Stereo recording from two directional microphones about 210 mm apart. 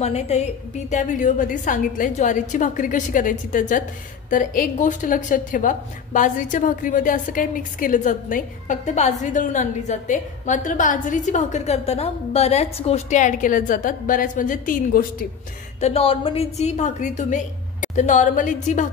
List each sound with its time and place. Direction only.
0.0 s a woman's voice: 30° left (ahead or behind)
15.8 s a woman's voice: 25° left (ahead or behind)